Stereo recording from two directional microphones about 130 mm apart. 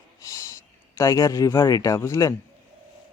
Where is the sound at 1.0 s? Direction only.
25° left (ahead or behind).